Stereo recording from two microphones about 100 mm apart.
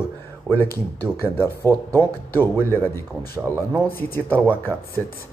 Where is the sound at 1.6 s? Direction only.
35° right (ahead or behind).